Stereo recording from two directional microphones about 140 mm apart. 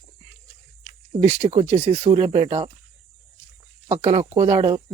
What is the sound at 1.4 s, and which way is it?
Speech, 45° right (ahead or behind).